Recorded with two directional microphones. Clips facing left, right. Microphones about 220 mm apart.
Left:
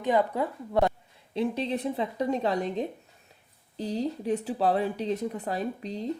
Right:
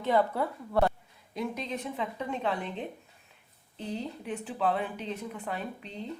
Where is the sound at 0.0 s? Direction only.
15° left (ahead or behind).